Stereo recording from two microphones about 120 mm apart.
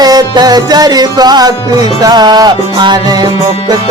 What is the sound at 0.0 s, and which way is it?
Music, 35° right (ahead or behind).